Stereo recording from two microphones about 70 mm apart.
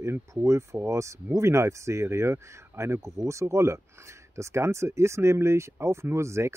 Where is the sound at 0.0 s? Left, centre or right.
Right.